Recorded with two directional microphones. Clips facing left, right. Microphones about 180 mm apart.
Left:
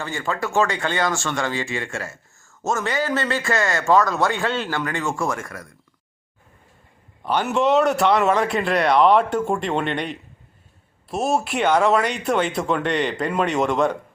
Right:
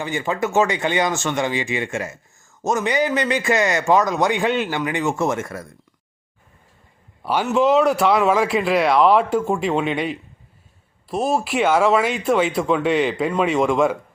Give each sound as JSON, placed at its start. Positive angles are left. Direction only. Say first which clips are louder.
{"t": 0.0, "sound": "a man's voice", "louder": "right 3 dB", "side_deg": -20}
{"t": 7.2, "sound": "speech", "louder": "right 2 dB", "side_deg": -5}